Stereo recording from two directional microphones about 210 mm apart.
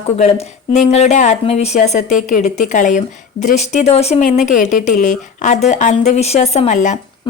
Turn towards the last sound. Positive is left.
turn(degrees=35)  # may be behind; listen again after turning